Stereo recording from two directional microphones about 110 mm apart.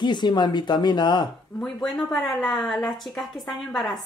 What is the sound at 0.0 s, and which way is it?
Speech, 45° left (ahead or behind).